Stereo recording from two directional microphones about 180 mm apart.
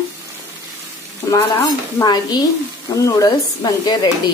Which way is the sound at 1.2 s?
20° left (ahead or behind).